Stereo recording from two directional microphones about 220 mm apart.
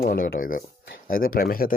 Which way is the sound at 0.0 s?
40° left (ahead or behind).